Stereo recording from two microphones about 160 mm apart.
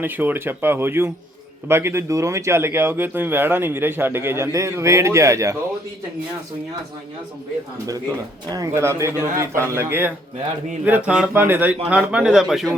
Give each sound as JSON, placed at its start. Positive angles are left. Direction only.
{"t": 0.0, "sound": "speech", "side_deg": -10}
{"t": 7.9, "sound": "a man's voice", "side_deg": -20}